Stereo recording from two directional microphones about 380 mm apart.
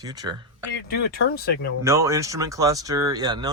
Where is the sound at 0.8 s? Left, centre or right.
Left.